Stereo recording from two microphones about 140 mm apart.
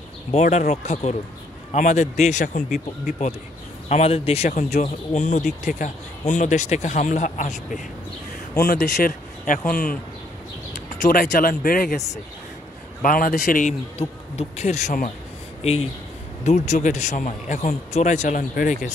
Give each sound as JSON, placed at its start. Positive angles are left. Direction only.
{"t": 0.3, "sound": "speech", "side_deg": 55}
{"t": 3.9, "sound": "speech", "side_deg": 45}
{"t": 8.6, "sound": "speech", "side_deg": 65}
{"t": 10.7, "sound": "speech", "side_deg": 70}
{"t": 13.0, "sound": "a man's voice", "side_deg": 80}
{"t": 13.9, "sound": "speech", "side_deg": 45}
{"t": 18.5, "sound": "speech", "side_deg": 75}